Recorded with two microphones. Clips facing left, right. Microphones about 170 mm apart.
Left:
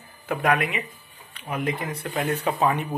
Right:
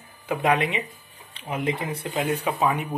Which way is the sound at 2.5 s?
5° right (ahead or behind).